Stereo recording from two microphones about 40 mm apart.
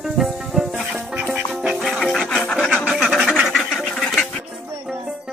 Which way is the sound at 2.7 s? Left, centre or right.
Right.